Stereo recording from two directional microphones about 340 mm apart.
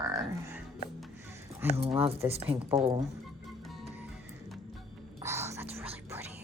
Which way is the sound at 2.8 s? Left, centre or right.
Centre.